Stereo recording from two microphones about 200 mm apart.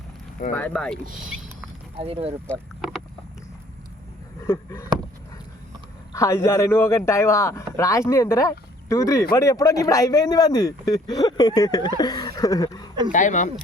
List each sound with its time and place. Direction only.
0.5 s speech: 5° left (ahead or behind)
2.0 s speech: 30° right (ahead or behind)
2.5 s speech: centre (ahead or behind)
4.4 s a man's voice: 15° left (ahead or behind)
6.1 s a man's voice: 15° left (ahead or behind)
13.1 s speech: 40° left (ahead or behind)